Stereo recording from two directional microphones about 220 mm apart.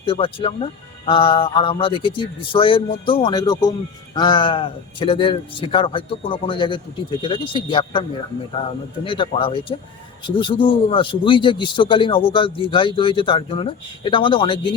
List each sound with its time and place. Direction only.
0.0 s speech: 25° left (ahead or behind)
9.0 s speech: 25° left (ahead or behind)